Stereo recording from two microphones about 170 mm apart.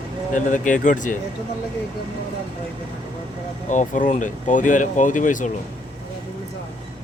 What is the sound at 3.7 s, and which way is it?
Speech, 50° left (ahead or behind).